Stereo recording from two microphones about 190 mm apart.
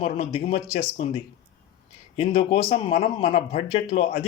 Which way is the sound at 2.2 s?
30° left (ahead or behind).